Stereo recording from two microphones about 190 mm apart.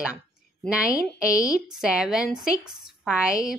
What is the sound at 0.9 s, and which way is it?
Speech, 20° left (ahead or behind).